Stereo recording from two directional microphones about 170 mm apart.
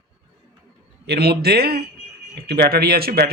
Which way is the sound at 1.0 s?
70° right (ahead or behind).